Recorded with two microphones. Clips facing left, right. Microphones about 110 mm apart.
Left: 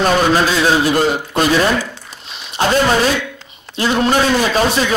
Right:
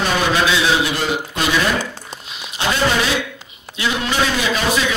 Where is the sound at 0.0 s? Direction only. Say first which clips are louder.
Left 4 dB; 40° left (ahead or behind).